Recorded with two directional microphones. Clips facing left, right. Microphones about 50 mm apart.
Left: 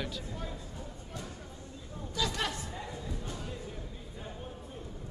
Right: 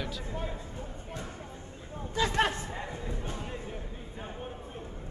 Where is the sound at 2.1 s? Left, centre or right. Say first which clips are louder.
Right 6 dB; right.